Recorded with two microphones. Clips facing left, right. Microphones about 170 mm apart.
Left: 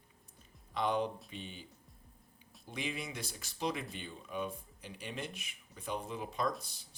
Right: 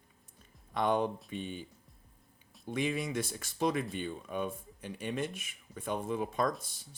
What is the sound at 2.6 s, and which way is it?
Speech, 50° right (ahead or behind).